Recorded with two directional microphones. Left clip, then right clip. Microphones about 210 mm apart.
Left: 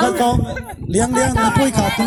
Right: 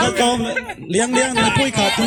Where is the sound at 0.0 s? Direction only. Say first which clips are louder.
Left 1 dB; 30° right (ahead or behind).